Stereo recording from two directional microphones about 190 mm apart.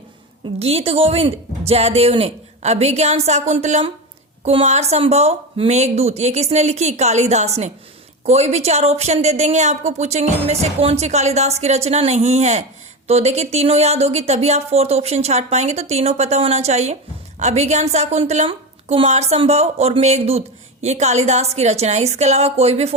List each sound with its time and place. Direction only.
0.6 s a woman's voice: 30° right (ahead or behind)